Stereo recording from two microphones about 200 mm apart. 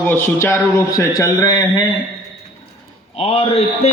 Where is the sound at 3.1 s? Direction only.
30° left (ahead or behind).